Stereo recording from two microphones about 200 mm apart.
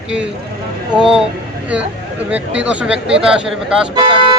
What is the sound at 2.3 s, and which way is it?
Speech, 5° right (ahead or behind).